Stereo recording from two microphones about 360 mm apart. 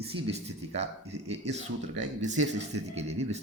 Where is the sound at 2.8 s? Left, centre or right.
Centre.